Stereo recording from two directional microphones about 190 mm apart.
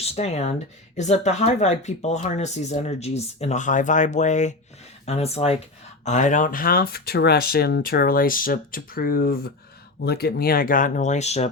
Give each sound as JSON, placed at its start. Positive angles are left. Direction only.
{"t": 0.0, "sound": "speech", "side_deg": 35}